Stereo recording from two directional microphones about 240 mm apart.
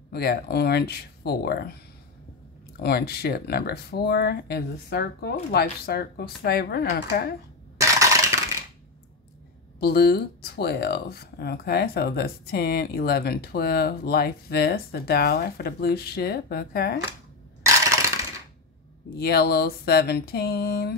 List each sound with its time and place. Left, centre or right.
0.1 s speech: left
2.8 s speech: left
7.7 s crushing: centre
9.8 s speech: left
17.6 s crushing: centre
19.1 s speech: left